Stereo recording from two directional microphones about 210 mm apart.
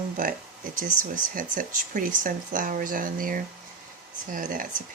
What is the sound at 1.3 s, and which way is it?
Speech, 40° right (ahead or behind).